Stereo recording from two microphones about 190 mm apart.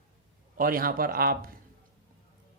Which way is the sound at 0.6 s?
50° right (ahead or behind).